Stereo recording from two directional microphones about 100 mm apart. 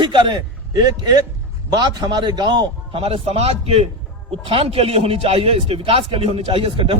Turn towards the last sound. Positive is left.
turn(degrees=-60)  # may be behind; listen again after turning